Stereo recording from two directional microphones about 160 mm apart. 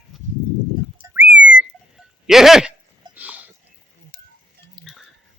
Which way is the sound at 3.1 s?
10° right (ahead or behind).